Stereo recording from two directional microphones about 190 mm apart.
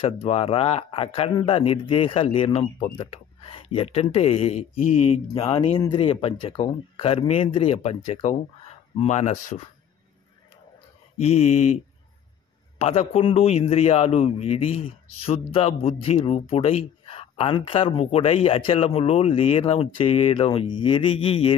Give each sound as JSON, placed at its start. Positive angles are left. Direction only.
{"t": 0.0, "sound": "a man's voice", "side_deg": 30}
{"t": 11.1, "sound": "a man's voice", "side_deg": 35}